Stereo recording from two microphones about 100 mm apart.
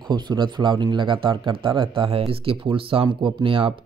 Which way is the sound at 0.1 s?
45° right (ahead or behind).